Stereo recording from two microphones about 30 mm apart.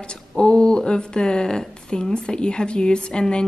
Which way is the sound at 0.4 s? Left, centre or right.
Left.